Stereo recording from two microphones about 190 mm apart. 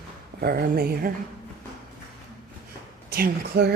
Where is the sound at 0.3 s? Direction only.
55° right (ahead or behind).